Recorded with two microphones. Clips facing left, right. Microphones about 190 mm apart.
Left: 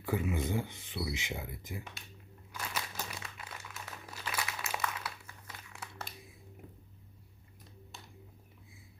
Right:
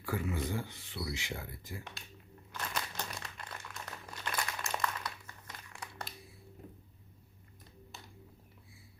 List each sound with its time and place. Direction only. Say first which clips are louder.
0.0 s speech: left 2 dB; 20° left (ahead or behind)
2.5 s crumpling: right 1 dB; 5° left (ahead or behind)
7.9 s a sound: even; centre (ahead or behind)